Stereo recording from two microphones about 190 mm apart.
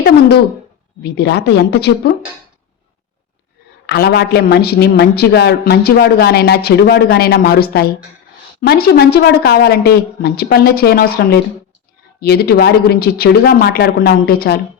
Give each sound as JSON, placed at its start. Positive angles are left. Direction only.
{"t": 1.0, "sound": "a woman's voice", "side_deg": 60}
{"t": 3.8, "sound": "a woman's voice", "side_deg": 60}